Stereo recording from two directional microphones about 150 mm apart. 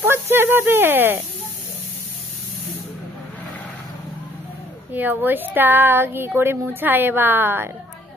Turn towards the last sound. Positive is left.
turn(degrees=-15)  # may be behind; listen again after turning